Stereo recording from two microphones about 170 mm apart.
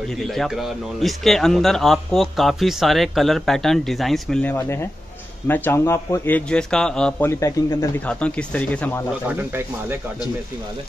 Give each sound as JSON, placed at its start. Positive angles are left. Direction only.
{"t": 0.1, "sound": "a man's voice", "side_deg": 0}
{"t": 8.1, "sound": "a man's voice", "side_deg": 5}
{"t": 9.3, "sound": "speech", "side_deg": -10}